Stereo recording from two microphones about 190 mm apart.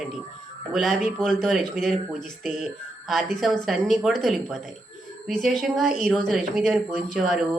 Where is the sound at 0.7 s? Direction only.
Centre (ahead or behind).